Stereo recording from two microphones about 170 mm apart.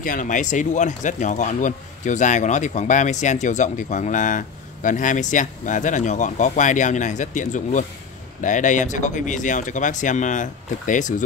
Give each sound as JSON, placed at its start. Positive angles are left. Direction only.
{"t": 0.0, "sound": "speech", "side_deg": 50}